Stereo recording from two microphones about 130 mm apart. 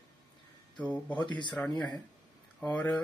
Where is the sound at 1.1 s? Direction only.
35° left (ahead or behind).